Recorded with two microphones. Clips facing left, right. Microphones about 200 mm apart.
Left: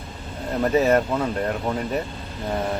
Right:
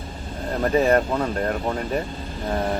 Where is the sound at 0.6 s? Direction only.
5° left (ahead or behind).